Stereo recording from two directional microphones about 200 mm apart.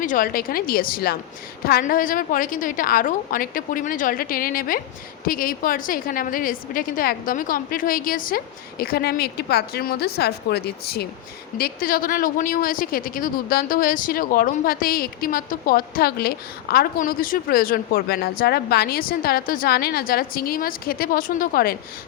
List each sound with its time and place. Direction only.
0.0 s speech: 45° left (ahead or behind)